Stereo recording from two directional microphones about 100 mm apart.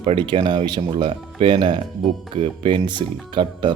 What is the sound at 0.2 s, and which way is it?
Speech, 50° right (ahead or behind).